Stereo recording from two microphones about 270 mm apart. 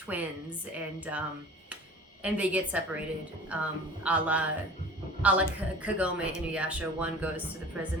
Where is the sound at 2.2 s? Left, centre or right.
Centre.